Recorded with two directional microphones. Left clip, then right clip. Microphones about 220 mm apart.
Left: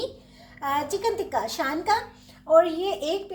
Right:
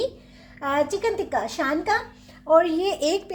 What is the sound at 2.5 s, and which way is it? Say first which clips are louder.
Speech: right 1 dB; 55° right (ahead or behind).